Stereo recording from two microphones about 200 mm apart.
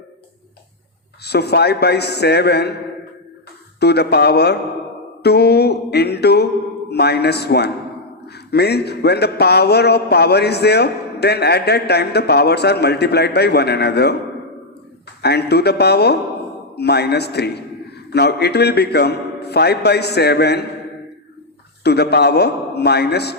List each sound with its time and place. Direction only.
1.2 s a man's voice: 55° left (ahead or behind)
3.8 s a man's voice: 55° left (ahead or behind)
15.2 s a man's voice: 55° left (ahead or behind)
21.8 s a man's voice: 55° left (ahead or behind)